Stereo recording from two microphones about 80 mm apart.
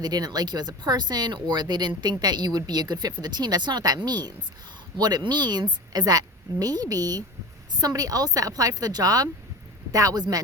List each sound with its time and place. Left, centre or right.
0.0 s a woman's voice: right